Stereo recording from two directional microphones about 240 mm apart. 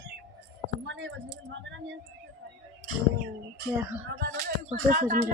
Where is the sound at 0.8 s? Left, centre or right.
Right.